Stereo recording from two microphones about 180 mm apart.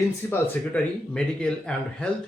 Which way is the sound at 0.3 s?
10° left (ahead or behind).